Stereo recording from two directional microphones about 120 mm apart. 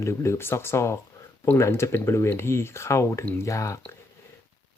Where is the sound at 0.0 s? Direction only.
25° left (ahead or behind).